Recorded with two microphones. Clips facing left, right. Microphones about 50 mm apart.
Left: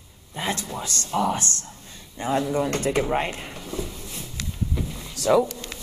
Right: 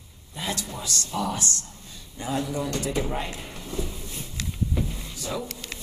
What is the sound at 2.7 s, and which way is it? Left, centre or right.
Speech, left.